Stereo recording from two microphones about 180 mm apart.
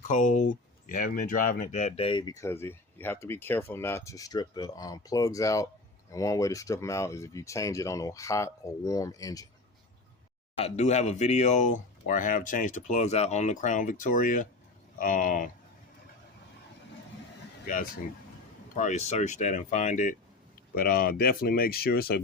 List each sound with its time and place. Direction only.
0.1 s speech: 45° left (ahead or behind); by 9.5 s 20° left (ahead or behind)
10.6 s speech: 40° left (ahead or behind)
18.8 s speech: 40° left (ahead or behind)
20.7 s speech: 55° left (ahead or behind)